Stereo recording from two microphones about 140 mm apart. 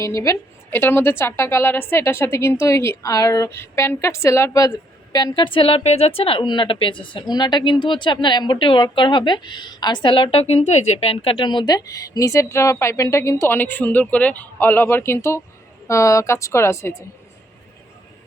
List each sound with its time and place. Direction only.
0.0 s a woman's voice: 20° left (ahead or behind)